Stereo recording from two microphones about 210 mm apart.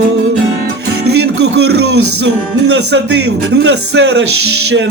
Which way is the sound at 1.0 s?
50° right (ahead or behind).